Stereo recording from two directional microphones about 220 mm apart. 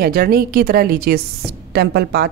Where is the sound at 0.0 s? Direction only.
40° right (ahead or behind).